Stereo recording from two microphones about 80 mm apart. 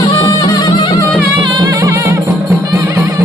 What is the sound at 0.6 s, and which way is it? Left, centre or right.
Music, left.